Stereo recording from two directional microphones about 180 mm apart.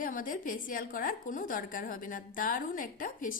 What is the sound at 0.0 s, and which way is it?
A woman's voice, 50° left (ahead or behind).